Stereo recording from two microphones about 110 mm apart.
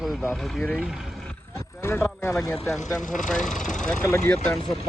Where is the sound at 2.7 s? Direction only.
Centre (ahead or behind).